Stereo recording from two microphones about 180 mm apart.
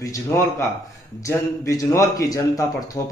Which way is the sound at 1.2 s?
15° left (ahead or behind).